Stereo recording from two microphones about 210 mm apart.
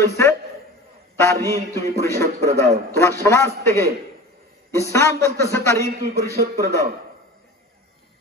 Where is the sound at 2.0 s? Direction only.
15° left (ahead or behind).